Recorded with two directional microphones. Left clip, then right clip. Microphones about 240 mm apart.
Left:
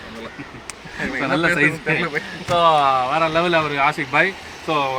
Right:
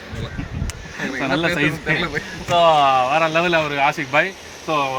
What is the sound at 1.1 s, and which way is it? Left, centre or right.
A man's voice, centre.